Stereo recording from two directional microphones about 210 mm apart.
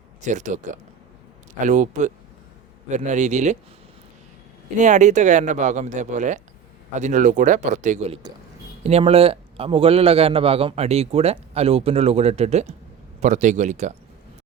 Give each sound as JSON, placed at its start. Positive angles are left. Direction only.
{"t": 0.3, "sound": "speech", "side_deg": -35}
{"t": 4.8, "sound": "a man's voice", "side_deg": -35}